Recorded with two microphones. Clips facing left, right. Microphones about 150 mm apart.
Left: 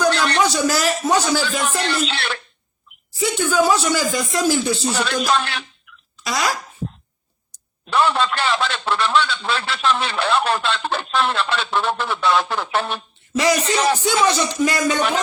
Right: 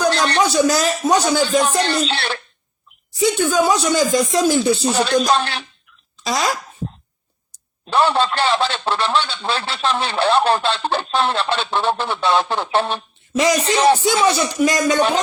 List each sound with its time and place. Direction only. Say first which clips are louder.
0.1 s a sound: right 1 dB; 30° right (ahead or behind)
0.5 s speech: right 3 dB; 15° right (ahead or behind)
1.5 s a man's voice: right 5 dB; 25° right (ahead or behind)
3.2 s speech: right 2 dB; 15° right (ahead or behind)
4.9 s a man's voice: right 4 dB; 30° right (ahead or behind)
6.2 s speech: right 2 dB; 25° right (ahead or behind)
7.9 s a man's voice: right 2 dB; 30° right (ahead or behind)
13.3 s speech: right 1 dB; 15° right (ahead or behind)
13.7 s a man's voice: right 4 dB; 30° right (ahead or behind)
14.3 s speech: right 2 dB; 15° right (ahead or behind)